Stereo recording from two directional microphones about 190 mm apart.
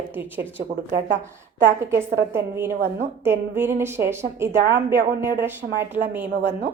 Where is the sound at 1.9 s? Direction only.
15° right (ahead or behind).